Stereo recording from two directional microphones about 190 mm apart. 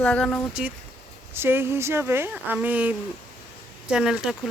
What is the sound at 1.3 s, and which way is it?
Speech, 10° right (ahead or behind).